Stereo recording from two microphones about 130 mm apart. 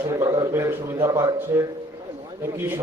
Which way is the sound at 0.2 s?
25° right (ahead or behind).